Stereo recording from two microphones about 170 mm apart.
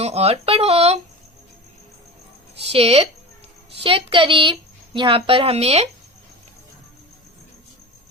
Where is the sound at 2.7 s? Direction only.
35° right (ahead or behind).